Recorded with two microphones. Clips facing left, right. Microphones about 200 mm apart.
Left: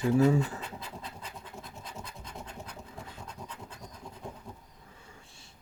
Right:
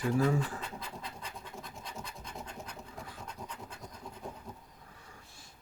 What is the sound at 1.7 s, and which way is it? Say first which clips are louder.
Scratch: even; 5° left (ahead or behind).